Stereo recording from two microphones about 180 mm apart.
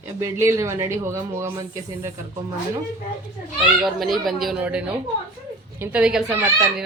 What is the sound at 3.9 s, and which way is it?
Speech, centre (ahead or behind).